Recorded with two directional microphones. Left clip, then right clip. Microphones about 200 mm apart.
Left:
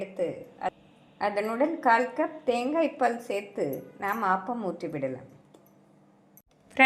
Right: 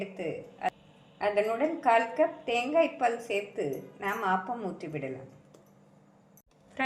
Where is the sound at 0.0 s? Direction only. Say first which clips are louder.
Left 4 dB; 30° left (ahead or behind).